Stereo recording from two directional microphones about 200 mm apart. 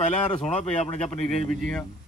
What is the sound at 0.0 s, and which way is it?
Speech, 35° left (ahead or behind).